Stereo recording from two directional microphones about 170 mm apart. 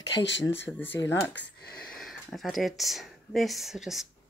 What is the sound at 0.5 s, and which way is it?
Speech, 10° left (ahead or behind).